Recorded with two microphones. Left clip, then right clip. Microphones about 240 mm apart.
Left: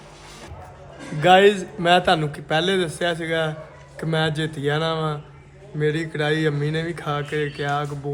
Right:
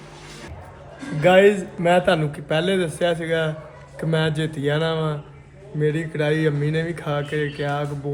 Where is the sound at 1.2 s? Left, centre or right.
Centre.